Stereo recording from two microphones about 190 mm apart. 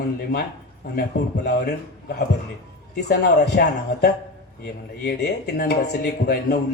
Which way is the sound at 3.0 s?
55° left (ahead or behind).